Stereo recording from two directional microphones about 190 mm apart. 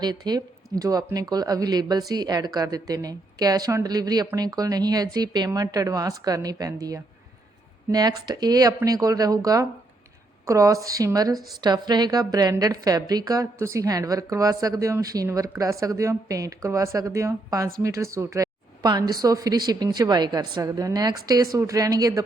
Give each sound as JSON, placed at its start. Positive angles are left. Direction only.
{"t": 0.0, "sound": "a woman's voice", "side_deg": -20}